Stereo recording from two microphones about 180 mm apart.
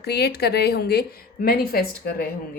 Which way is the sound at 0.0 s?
60° left (ahead or behind).